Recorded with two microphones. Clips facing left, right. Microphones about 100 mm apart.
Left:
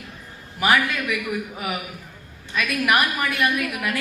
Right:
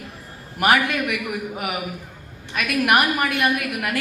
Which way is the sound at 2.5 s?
55° right (ahead or behind).